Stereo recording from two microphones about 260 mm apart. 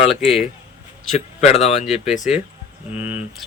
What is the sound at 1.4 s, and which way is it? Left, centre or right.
Speech, left.